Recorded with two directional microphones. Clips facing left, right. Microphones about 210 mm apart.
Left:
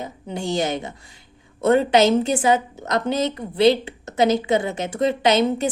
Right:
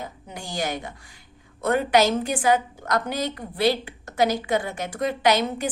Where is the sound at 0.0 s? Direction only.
25° left (ahead or behind).